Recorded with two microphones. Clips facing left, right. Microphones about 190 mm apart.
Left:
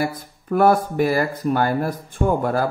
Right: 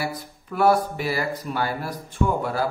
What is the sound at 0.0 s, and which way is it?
Speech, 50° left (ahead or behind).